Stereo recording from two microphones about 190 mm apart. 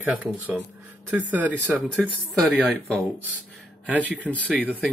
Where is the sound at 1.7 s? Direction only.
5° right (ahead or behind).